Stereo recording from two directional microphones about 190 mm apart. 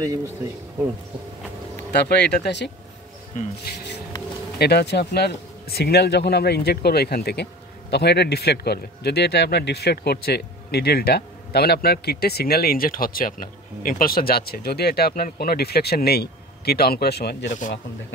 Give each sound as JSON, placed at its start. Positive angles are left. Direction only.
{"t": 0.0, "sound": "speech", "side_deg": -20}
{"t": 1.9, "sound": "a man's voice", "side_deg": 60}
{"t": 17.5, "sound": "speech", "side_deg": 40}